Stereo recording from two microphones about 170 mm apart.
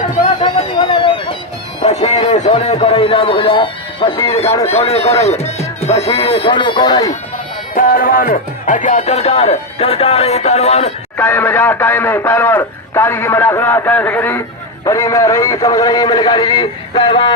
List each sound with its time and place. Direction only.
0.4 s a sound: 25° left (ahead or behind)
1.8 s speech: 40° left (ahead or behind)
5.2 s music: 40° left (ahead or behind)
6.1 s a man's voice: 35° left (ahead or behind)
7.8 s speech: 55° left (ahead or behind); by 10.9 s 40° left (ahead or behind)
11.2 s a man's voice: 10° left (ahead or behind); by 17.3 s 30° left (ahead or behind)